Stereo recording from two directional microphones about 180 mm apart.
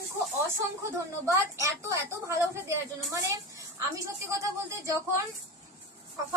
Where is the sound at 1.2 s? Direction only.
15° right (ahead or behind).